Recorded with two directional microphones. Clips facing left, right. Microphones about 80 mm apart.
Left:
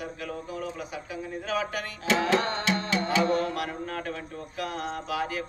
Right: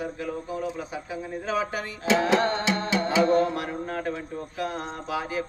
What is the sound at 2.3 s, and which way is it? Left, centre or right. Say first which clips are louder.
Music: right 3 dB; right.